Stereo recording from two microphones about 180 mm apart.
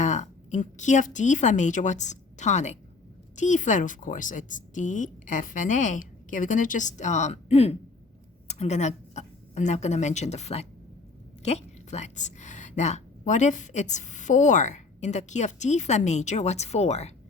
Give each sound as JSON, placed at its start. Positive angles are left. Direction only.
{"t": 0.0, "sound": "a woman's voice", "side_deg": 40}